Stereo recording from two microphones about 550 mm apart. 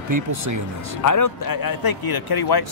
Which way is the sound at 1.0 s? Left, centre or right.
Left.